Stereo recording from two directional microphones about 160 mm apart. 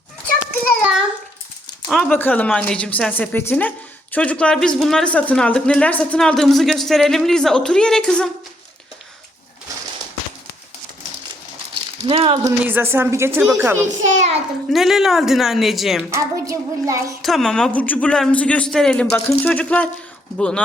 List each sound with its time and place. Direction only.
1.9 s speech: 5° left (ahead or behind)
12.0 s speech: 35° right (ahead or behind)
12.5 s a woman's voice: 15° right (ahead or behind)
13.8 s a child's voice: 50° right (ahead or behind)
14.7 s speech: centre (ahead or behind)
16.0 s a sound: 20° right (ahead or behind)
17.2 s speech: centre (ahead or behind)